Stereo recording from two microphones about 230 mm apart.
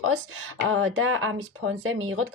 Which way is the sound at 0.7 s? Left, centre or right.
Right.